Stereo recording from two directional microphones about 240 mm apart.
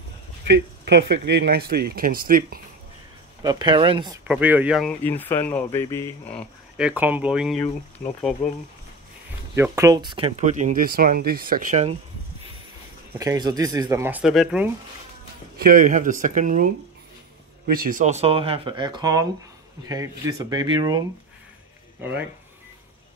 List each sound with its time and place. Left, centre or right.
0.5 s speech: right
3.4 s speech: centre
4.3 s speech: centre
6.8 s speech: centre
8.0 s speech: left
9.6 s speech: centre
13.2 s speech: centre
15.5 s speech: right; by 21.0 s centre